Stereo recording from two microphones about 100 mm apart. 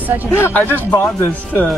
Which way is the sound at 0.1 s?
15° right (ahead or behind).